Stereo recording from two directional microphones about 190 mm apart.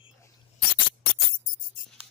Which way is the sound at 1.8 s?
45° left (ahead or behind).